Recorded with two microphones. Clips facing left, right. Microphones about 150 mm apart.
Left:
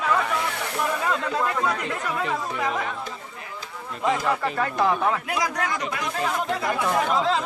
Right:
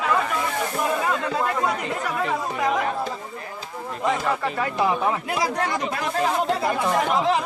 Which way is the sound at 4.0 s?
Centre (ahead or behind).